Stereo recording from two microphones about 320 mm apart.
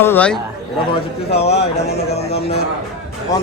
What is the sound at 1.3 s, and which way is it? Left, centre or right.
Speech, centre.